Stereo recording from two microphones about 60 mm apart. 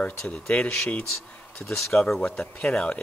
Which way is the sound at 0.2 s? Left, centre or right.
Centre.